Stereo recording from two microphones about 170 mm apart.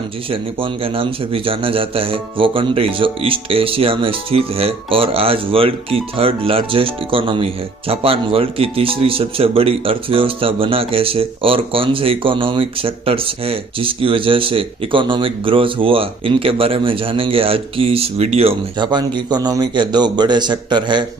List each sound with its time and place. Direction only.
0.3 s a man's voice: 30° right (ahead or behind)